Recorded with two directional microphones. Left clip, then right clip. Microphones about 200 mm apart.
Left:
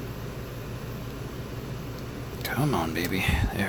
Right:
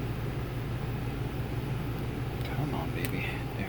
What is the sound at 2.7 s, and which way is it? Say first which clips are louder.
Speech: left 7 dB; 60° left (ahead or behind).